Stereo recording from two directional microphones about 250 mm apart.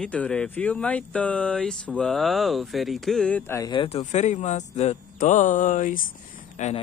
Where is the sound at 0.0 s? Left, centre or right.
Centre.